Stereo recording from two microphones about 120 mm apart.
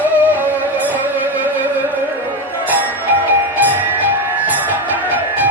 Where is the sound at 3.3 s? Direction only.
15° right (ahead or behind).